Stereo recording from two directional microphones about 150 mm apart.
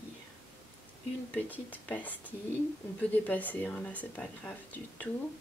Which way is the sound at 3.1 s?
10° left (ahead or behind).